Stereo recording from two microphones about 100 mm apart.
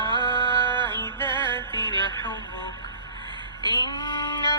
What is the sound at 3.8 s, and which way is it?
Female singing, 45° left (ahead or behind).